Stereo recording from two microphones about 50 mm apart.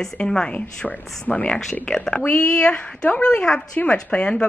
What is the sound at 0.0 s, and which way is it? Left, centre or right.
Speech, centre.